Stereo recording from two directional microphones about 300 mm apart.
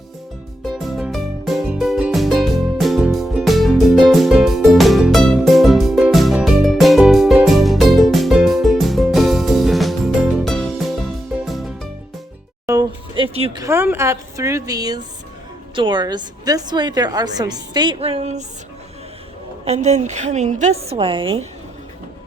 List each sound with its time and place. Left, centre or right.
0.8 s music: centre
12.6 s a woman's voice: centre
19.6 s a woman's voice: right